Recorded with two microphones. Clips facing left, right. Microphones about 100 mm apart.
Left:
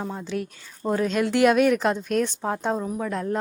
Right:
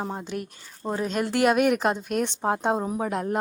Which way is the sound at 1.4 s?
5° right (ahead or behind).